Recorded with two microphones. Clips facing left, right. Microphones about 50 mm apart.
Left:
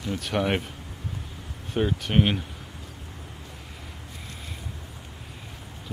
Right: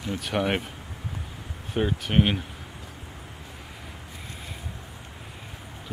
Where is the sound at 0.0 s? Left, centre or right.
Centre.